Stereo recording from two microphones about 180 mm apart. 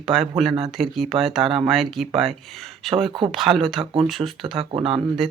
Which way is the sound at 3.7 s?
30° right (ahead or behind).